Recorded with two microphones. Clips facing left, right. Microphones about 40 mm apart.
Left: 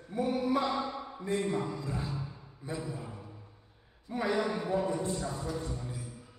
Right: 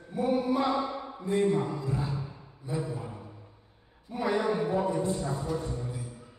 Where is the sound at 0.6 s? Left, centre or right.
Centre.